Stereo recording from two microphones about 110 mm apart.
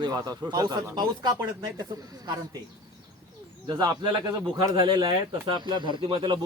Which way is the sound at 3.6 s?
35° right (ahead or behind).